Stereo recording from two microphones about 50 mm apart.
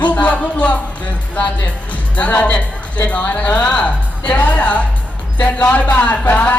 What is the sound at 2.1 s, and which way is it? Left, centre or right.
A woman's voice, left.